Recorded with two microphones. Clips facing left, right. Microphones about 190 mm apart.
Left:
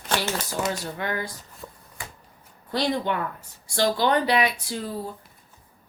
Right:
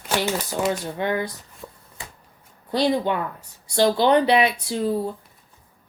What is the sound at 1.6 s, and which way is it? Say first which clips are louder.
Chopping: right 2 dB; 5° right (ahead or behind).